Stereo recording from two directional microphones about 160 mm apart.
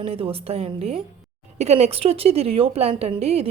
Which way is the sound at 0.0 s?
35° right (ahead or behind).